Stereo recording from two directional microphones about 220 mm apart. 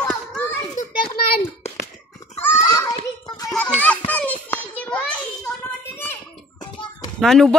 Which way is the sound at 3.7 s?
5° left (ahead or behind).